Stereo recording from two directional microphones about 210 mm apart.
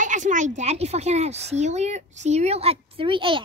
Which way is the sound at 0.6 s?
30° right (ahead or behind).